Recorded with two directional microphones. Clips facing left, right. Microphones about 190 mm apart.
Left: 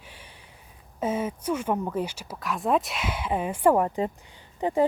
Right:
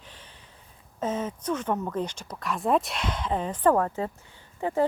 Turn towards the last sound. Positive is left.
turn(degrees=20)  # may be behind; listen again after turning